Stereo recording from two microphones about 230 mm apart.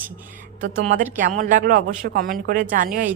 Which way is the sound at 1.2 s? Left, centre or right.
Right.